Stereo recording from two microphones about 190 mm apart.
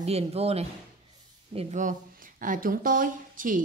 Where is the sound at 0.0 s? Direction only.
35° right (ahead or behind).